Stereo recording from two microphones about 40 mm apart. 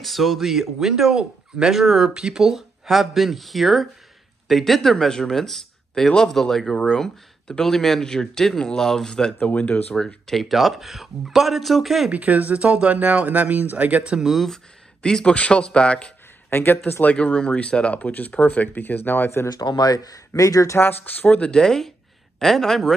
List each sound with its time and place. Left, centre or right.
0.0 s speech: centre
6.9 s speech: centre
10.4 s speech: centre
12.1 s speech: right
12.9 s speech: right
14.0 s speech: centre
14.3 s speech: centre
15.2 s speech: left
16.4 s speech: left
17.1 s speech: left
21.0 s speech: left
21.4 s speech: centre